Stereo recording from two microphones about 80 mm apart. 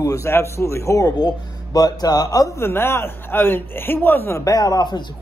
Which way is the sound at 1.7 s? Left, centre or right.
Left.